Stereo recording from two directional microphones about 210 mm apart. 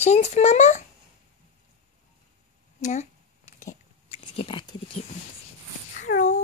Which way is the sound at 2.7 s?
30° left (ahead or behind).